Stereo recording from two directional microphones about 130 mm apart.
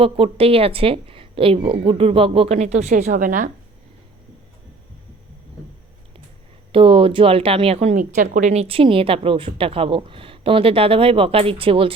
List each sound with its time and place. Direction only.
0.0 s a woman's voice: 45° right (ahead or behind); by 3.5 s 85° right
6.7 s a woman's voice: 45° right (ahead or behind)